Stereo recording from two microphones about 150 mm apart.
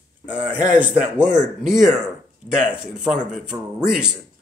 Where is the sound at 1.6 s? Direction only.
5° right (ahead or behind).